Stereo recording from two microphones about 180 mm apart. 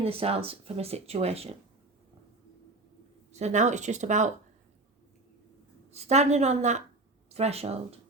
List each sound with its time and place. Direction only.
0.0 s speech: 35° right (ahead or behind)
3.3 s speech: 40° right (ahead or behind)
5.9 s speech: 40° right (ahead or behind)